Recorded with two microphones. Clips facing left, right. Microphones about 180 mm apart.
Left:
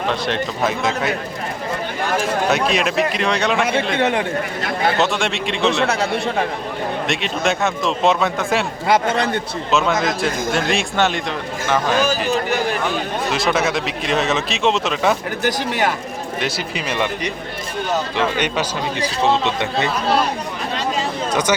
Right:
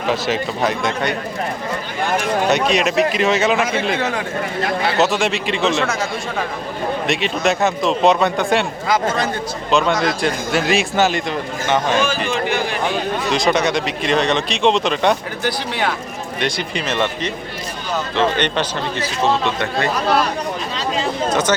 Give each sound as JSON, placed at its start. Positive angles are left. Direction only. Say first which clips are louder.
{"t": 0.1, "sound": "a man's voice", "louder": "right 6 dB", "side_deg": -5}
{"t": 2.5, "sound": "a man's voice", "louder": "right 3 dB", "side_deg": 0}
{"t": 4.9, "sound": "a man's voice", "louder": "right 2 dB", "side_deg": 0}
{"t": 7.1, "sound": "a man's voice", "louder": "right 3 dB", "side_deg": 0}
{"t": 9.7, "sound": "a man's voice", "louder": "right 1 dB", "side_deg": 0}
{"t": 12.3, "sound": "speech", "louder": "left 1 dB", "side_deg": 45}
{"t": 13.3, "sound": "a man's voice", "louder": "right 2 dB", "side_deg": 0}
{"t": 16.4, "sound": "speech", "louder": "right 3 dB", "side_deg": 5}
{"t": 18.3, "sound": "speech", "louder": "right 1 dB", "side_deg": 10}